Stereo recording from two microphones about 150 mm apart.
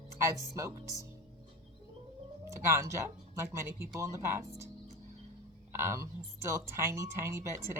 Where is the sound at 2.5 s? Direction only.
20° right (ahead or behind).